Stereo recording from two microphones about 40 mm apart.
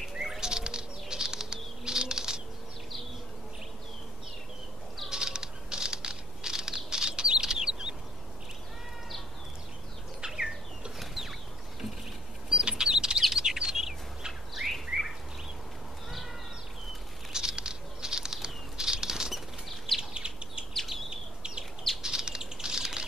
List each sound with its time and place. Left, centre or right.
0.1 s bird: centre
5.1 s a sound: centre
10.2 s bird: right
11.0 s bird flight: centre
12.4 s a sound: right
13.3 s chirp: centre
13.8 s bird: centre
17.3 s bird: centre
20.0 s bird: right
20.7 s bird: centre
21.1 s bird: right
22.0 s a sound: centre